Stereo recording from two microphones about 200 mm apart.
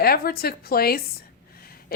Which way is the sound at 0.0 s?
50° left (ahead or behind).